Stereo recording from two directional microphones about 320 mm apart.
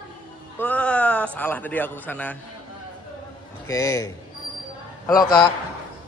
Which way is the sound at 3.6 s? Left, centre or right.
Centre.